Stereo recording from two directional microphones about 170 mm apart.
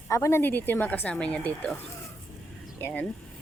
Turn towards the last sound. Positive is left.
turn(degrees=10)  # may be behind; listen again after turning